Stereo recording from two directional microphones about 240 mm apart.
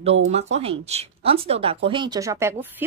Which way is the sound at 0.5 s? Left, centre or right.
Right.